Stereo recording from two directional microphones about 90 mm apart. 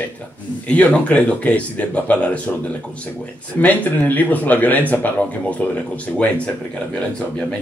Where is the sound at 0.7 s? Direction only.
15° left (ahead or behind).